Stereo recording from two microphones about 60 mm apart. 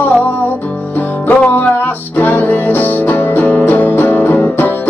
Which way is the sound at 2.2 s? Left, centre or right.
Left.